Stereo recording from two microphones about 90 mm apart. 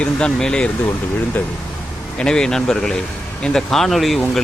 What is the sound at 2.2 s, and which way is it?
Speech, 10° left (ahead or behind).